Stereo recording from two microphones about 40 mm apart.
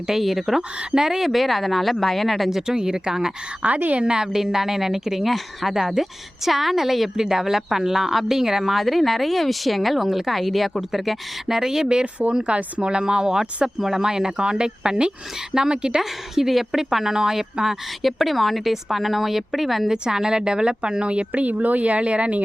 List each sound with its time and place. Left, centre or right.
0.1 s a woman's voice: centre
3.6 s speech: right
4.0 s a woman's voice: centre
5.2 s a woman's voice: centre
8.7 s a woman's voice: centre; by 16.0 s right
16.0 s a woman's voice: centre
18.0 s speech: centre
19.9 s speech: centre
21.4 s speech: right